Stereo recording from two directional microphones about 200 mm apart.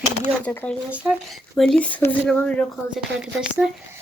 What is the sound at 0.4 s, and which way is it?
Speech, 5° left (ahead or behind).